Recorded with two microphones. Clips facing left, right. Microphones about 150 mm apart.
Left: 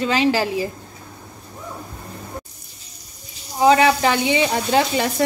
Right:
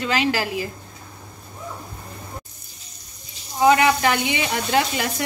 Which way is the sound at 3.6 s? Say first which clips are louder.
Left 2 dB; 30° left (ahead or behind).